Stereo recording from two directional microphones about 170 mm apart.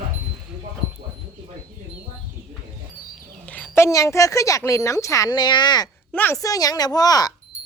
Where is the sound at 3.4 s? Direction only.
10° left (ahead or behind); by 5.9 s 25° left (ahead or behind).